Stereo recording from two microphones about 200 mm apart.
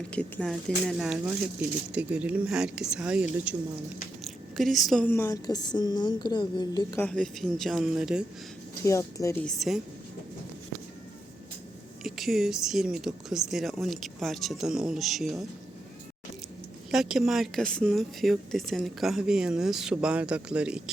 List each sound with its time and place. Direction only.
0.1 s a woman's voice: 5° left (ahead or behind); by 7.0 s 20° left (ahead or behind)
7.0 s speech: 5° left (ahead or behind)
8.8 s speech: 15° left (ahead or behind); by 9.8 s centre (ahead or behind)
12.0 s speech: centre (ahead or behind)
16.9 s speech: centre (ahead or behind)